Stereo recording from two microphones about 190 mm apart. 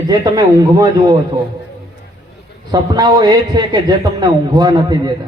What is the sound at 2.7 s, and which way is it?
A man's voice, 20° right (ahead or behind).